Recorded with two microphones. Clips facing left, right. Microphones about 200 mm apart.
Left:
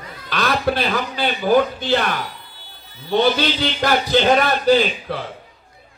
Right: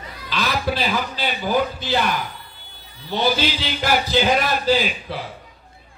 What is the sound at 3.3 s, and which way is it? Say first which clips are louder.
A man's voice: left 3 dB; 60° left (ahead or behind).